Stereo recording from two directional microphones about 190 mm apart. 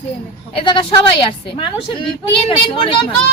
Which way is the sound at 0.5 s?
25° left (ahead or behind).